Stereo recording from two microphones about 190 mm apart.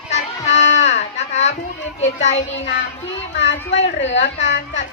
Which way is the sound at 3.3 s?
65° left (ahead or behind).